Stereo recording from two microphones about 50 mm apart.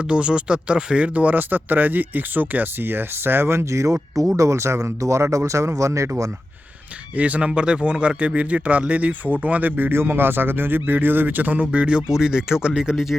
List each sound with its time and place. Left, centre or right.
0.1 s speech: centre; by 6.2 s right
7.2 s speech: right